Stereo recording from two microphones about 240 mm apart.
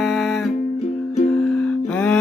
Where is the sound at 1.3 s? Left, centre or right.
Centre.